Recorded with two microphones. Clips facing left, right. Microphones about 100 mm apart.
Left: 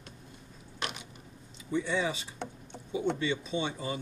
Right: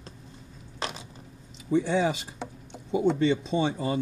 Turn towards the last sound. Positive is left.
turn(degrees=-85)